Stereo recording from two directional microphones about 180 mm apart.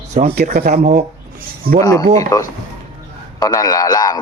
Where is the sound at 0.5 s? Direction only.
60° right (ahead or behind).